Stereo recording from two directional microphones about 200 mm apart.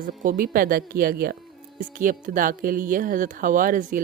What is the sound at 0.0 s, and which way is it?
A woman's voice, 40° right (ahead or behind).